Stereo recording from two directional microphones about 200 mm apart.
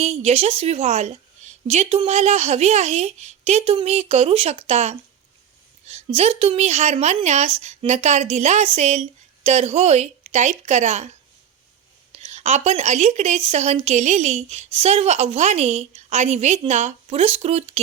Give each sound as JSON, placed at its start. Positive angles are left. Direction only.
{"t": 0.0, "sound": "speech", "side_deg": -30}
{"t": 12.1, "sound": "speech", "side_deg": -30}